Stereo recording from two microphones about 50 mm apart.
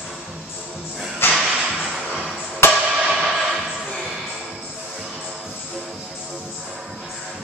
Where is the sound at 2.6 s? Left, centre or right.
Left.